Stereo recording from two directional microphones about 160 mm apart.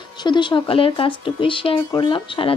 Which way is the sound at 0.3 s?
30° left (ahead or behind).